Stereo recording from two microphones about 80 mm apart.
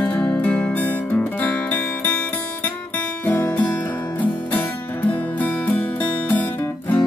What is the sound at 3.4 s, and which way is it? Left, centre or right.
Music, centre.